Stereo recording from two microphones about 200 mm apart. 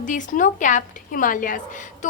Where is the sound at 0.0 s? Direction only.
40° left (ahead or behind).